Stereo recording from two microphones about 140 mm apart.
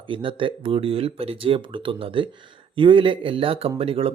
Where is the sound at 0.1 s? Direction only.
35° right (ahead or behind).